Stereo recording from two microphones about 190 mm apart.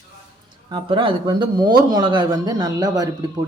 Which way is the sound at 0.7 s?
25° right (ahead or behind).